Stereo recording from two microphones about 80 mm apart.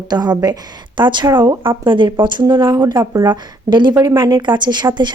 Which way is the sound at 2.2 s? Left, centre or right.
Right.